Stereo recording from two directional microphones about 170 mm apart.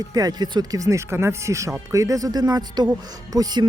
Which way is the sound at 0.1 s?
20° right (ahead or behind).